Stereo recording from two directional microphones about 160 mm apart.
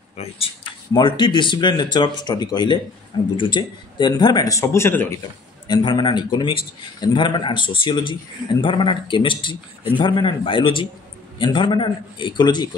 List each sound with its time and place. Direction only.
0.2 s speech: 35° left (ahead or behind); by 5.2 s 15° left (ahead or behind)
5.7 s speech: 30° left (ahead or behind)